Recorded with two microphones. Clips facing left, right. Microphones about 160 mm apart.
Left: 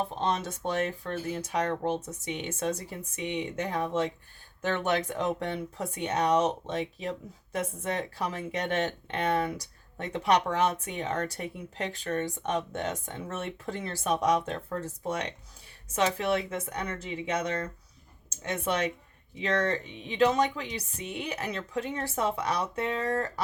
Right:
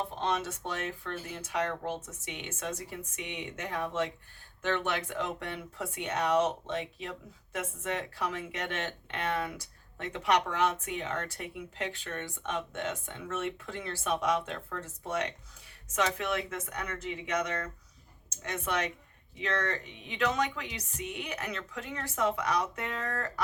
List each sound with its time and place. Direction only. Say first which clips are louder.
0.2 s speech: left 2 dB; 35° left (ahead or behind)
19.5 s speech: left 7 dB; 30° left (ahead or behind)